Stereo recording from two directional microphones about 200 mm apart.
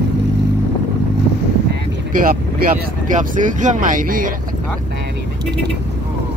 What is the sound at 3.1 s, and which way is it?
Speech, 40° right (ahead or behind).